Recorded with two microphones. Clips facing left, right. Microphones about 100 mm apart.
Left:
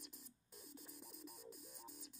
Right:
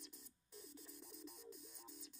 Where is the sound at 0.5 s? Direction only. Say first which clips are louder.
Right 1 dB; 50° left (ahead or behind).